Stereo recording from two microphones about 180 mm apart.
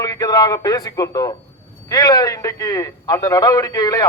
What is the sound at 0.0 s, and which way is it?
A man's voice, 20° left (ahead or behind).